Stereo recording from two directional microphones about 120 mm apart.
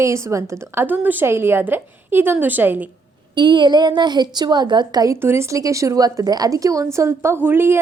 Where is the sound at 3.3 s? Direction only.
40° right (ahead or behind).